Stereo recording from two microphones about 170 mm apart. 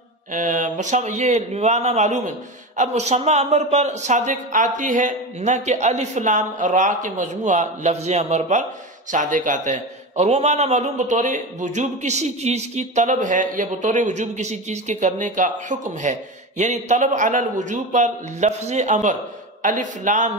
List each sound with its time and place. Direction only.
0.3 s a man's voice: 50° right (ahead or behind)